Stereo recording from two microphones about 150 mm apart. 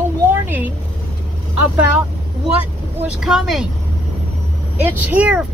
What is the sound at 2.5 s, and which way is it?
Speech, 5° right (ahead or behind).